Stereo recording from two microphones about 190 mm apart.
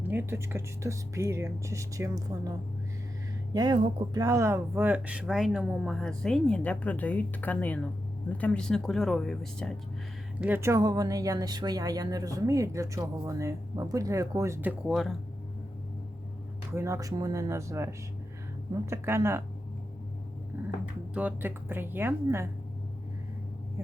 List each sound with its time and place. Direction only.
0.0 s speech: 10° right (ahead or behind)
3.5 s speech: 20° right (ahead or behind); by 9.7 s 5° left (ahead or behind)
10.4 s speech: 10° right (ahead or behind)
16.7 s speech: 15° right (ahead or behind)
21.1 s speech: 5° right (ahead or behind)